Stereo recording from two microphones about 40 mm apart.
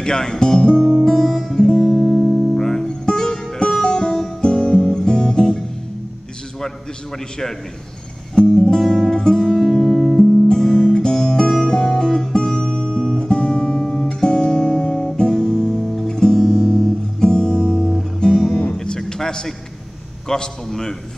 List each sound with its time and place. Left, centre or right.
0.0 s music: centre
2.0 s music: centre
2.5 s music: centre
8.4 s music: centre
10.5 s music: centre
20.3 s a man's voice: centre